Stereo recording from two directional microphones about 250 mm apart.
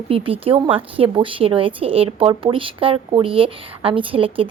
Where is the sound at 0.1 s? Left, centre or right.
Right.